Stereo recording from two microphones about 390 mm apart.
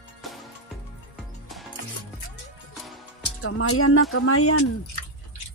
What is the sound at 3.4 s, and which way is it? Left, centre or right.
Speech, left.